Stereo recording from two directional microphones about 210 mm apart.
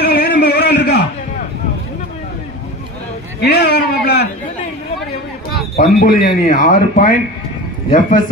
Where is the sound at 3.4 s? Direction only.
50° left (ahead or behind).